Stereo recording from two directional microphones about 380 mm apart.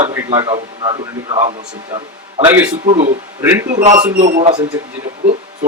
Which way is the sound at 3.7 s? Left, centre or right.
Centre.